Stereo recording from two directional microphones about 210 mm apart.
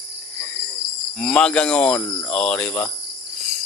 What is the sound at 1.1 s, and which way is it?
Speech, 5° left (ahead or behind).